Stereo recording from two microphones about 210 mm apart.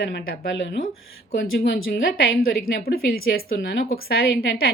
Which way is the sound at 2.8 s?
45° left (ahead or behind).